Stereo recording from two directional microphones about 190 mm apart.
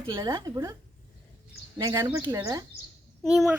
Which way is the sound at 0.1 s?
15° right (ahead or behind).